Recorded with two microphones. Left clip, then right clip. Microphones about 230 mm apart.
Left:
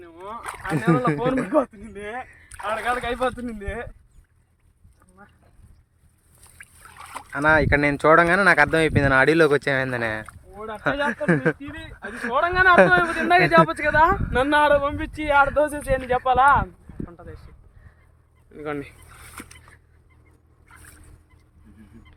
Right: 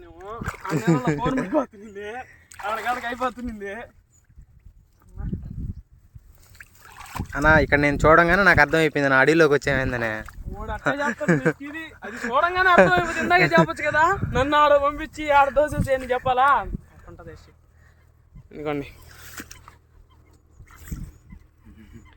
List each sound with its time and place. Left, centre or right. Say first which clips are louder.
0.0 s rowboat: left 1 dB; left
0.4 s a sound: even; centre
0.8 s speech: left 2 dB; centre
1.8 s a sound: right 1 dB; centre
2.0 s speech: left 4 dB; centre
3.0 s speech: left 2 dB; centre
3.5 s speech: left 1 dB; centre
6.6 s speech: even; centre
12.3 s speech: left 1 dB; centre
13.0 s speech: left 2 dB; centre
13.4 s speech: left 2 dB; centre
16.0 s a sound: left 3 dB; centre
18.6 s speech: right 2 dB; centre
19.4 s a sound: right 2 dB; centre